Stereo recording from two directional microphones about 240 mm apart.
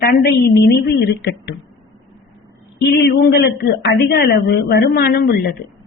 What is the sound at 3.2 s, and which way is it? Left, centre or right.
A woman's voice, left.